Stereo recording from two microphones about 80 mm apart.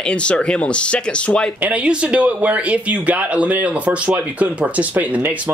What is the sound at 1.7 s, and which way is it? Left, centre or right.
Speech, centre.